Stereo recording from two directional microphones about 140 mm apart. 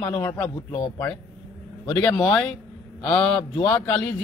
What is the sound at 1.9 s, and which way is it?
A man's voice, 10° left (ahead or behind).